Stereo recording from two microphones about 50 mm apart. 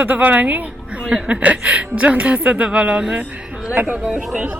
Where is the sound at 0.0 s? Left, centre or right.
Right.